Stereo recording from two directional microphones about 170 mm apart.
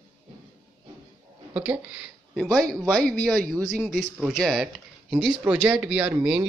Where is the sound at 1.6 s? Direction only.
10° right (ahead or behind).